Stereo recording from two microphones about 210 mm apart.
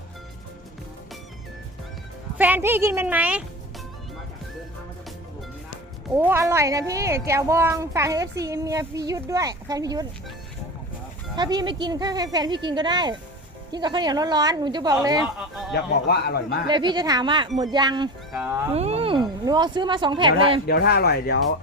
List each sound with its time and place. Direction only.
2.4 s speech: 10° right (ahead or behind)
6.1 s speech: 10° right (ahead or behind)
11.3 s speech: 20° right (ahead or behind)
15.7 s a man's voice: 50° left (ahead or behind)
16.6 s speech: 20° right (ahead or behind)
18.3 s speech: 5° right (ahead or behind)
18.7 s speech: 30° right (ahead or behind)
20.7 s a man's voice: 50° left (ahead or behind)